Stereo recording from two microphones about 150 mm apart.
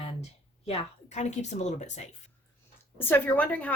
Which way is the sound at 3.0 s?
15° left (ahead or behind).